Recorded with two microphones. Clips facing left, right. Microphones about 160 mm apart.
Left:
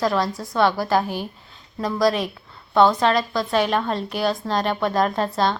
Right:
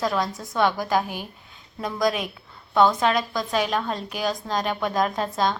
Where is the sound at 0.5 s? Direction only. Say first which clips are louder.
Left 3 dB; 15° right (ahead or behind).